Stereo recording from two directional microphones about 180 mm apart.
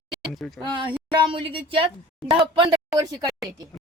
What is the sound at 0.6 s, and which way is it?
A woman's voice, 25° right (ahead or behind).